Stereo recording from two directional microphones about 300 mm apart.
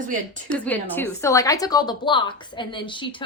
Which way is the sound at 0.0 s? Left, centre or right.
Right.